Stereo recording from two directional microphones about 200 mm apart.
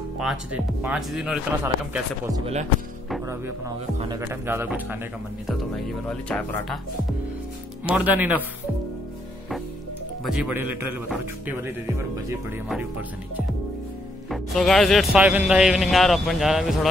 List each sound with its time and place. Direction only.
0.2 s speech: 5° right (ahead or behind)
2.3 s speech: 30° right (ahead or behind)
3.3 s speech: 15° right (ahead or behind)
6.0 s speech: 5° left (ahead or behind)
7.8 s speech: 5° right (ahead or behind)
11.1 s speech: 10° right (ahead or behind)
14.3 s speech: centre (ahead or behind)